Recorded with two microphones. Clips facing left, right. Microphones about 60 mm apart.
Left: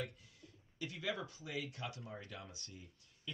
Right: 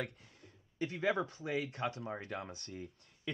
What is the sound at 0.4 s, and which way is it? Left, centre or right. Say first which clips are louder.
Speech: right 8 dB; right.